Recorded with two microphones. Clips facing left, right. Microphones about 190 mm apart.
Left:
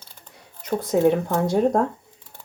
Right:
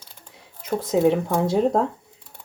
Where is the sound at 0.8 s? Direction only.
5° right (ahead or behind).